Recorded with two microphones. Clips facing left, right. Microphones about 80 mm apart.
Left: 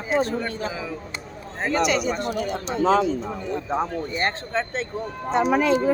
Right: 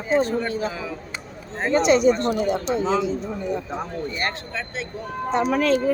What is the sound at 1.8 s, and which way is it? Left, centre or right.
Speech, right.